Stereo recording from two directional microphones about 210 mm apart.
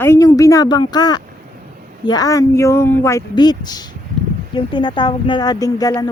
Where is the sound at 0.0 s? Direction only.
15° left (ahead or behind).